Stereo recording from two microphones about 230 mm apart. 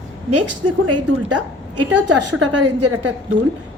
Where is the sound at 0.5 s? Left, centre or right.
Right.